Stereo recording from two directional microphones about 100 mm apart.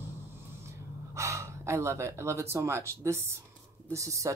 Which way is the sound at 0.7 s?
30° right (ahead or behind).